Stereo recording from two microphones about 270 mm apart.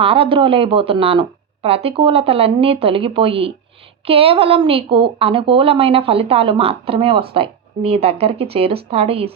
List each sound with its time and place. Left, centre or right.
0.0 s a woman's voice: right